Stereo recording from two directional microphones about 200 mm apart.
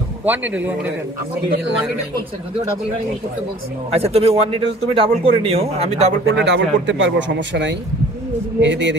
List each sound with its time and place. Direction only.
0.2 s a man's voice: 10° right (ahead or behind)
3.9 s speech: 30° right (ahead or behind)
6.2 s a man's voice: 60° right (ahead or behind)